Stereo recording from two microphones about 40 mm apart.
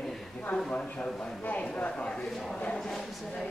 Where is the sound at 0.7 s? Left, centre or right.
Left.